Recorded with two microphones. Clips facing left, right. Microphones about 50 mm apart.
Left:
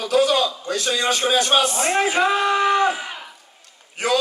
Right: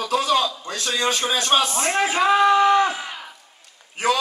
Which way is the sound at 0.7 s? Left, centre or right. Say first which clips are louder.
Left 2 dB; right.